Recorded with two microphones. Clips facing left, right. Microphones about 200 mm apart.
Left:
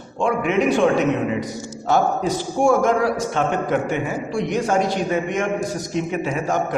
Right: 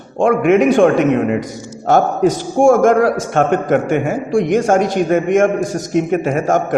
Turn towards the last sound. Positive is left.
turn(degrees=-50)  # may be behind; listen again after turning